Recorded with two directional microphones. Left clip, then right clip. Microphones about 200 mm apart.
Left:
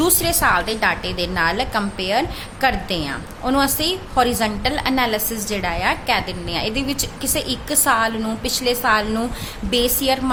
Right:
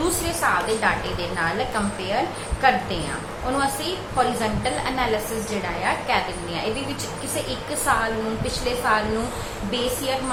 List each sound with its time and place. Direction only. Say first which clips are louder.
0.0 s a woman's voice: left 5 dB; 55° left (ahead or behind)